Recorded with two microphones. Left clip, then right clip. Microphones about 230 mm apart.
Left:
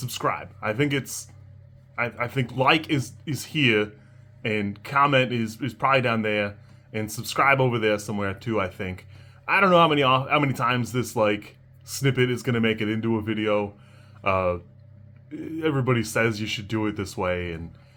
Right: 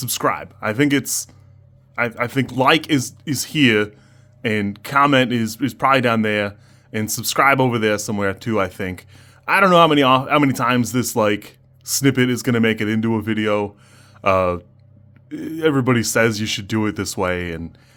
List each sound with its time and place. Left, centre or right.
0.0 s speech: right